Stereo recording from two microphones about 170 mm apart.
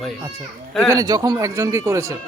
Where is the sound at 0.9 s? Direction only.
20° right (ahead or behind).